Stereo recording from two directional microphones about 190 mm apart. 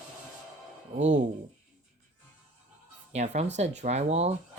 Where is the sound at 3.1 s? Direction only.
35° right (ahead or behind).